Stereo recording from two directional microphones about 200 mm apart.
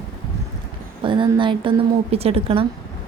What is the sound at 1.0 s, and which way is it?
A woman's voice, 25° right (ahead or behind).